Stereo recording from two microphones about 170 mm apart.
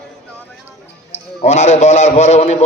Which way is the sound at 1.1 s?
40° left (ahead or behind).